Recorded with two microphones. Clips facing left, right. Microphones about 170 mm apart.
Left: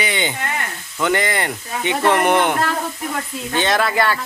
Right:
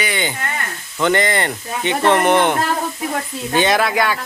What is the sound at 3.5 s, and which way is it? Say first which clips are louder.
Speech: right 2 dB; 10° right (ahead or behind).